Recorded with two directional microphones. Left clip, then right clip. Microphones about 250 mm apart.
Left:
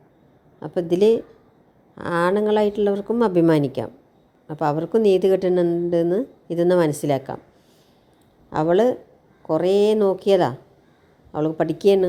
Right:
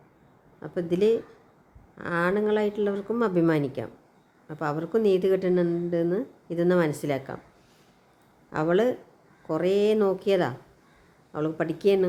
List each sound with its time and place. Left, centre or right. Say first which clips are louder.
0.6 s a woman's voice: left 6 dB; centre
8.4 s a woman's voice: left 6 dB; centre